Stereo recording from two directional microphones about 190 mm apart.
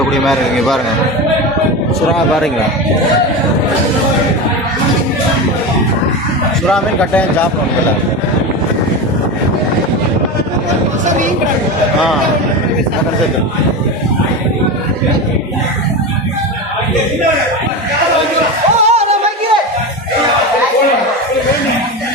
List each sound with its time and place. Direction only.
0.3 s a man's voice: centre (ahead or behind)
6.7 s speech: 5° left (ahead or behind)
18.9 s music: 35° right (ahead or behind)